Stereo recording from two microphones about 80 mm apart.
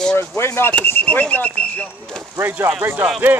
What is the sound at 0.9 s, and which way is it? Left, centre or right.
Speech, left.